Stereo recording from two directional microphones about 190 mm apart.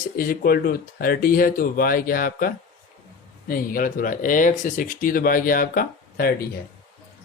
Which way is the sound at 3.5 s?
50° left (ahead or behind).